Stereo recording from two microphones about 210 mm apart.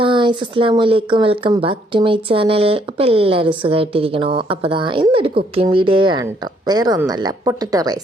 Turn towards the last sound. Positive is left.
turn(degrees=-20)  # may be behind; listen again after turning